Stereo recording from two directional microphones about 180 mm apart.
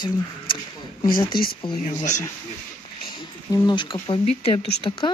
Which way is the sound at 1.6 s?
25° left (ahead or behind).